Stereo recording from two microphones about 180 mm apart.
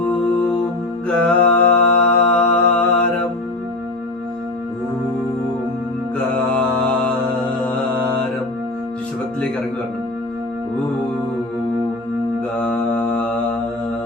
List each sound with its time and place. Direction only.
1.0 s mantra: 5° left (ahead or behind)
12.6 s mantra: 5° left (ahead or behind)